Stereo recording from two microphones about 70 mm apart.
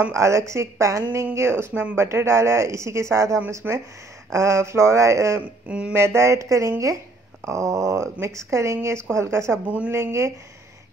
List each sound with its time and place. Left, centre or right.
0.1 s speech: right
1.3 s speech: right
5.4 s a sound: centre
5.9 s speech: right